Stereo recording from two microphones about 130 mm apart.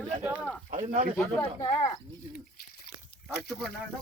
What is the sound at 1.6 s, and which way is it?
Speech, 45° left (ahead or behind).